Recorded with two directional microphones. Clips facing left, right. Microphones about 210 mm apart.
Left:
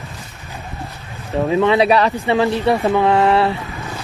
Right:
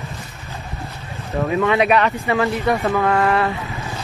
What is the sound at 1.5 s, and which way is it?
Speech, 30° left (ahead or behind).